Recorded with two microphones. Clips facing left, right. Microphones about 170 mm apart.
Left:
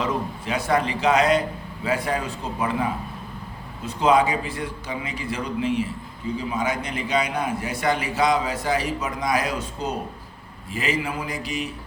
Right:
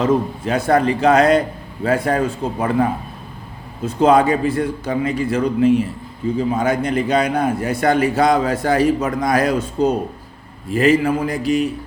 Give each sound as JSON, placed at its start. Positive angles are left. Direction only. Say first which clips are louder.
{"t": 0.0, "sound": "a man's voice", "louder": "right 9 dB", "side_deg": -45}